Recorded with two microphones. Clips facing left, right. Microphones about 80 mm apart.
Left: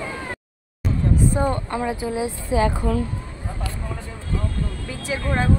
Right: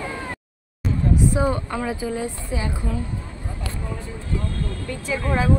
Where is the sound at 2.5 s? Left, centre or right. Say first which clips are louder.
Left 10 dB; left.